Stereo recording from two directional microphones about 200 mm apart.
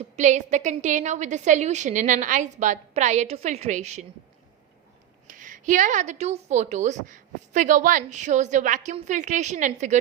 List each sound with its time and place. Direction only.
0.0 s a woman's voice: 35° right (ahead or behind)
5.3 s a woman's voice: 40° right (ahead or behind)